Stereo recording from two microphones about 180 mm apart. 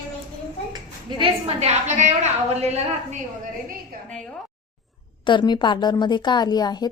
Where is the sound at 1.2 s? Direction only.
35° right (ahead or behind).